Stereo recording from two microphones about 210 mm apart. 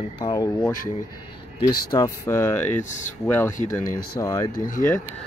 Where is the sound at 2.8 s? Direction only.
35° left (ahead or behind).